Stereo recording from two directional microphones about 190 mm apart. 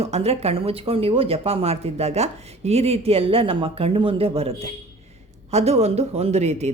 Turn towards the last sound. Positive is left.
turn(degrees=-35)  # may be behind; listen again after turning